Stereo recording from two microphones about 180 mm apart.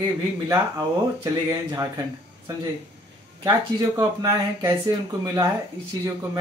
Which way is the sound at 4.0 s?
20° right (ahead or behind).